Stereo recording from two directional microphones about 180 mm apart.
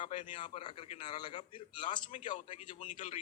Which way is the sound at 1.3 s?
40° left (ahead or behind).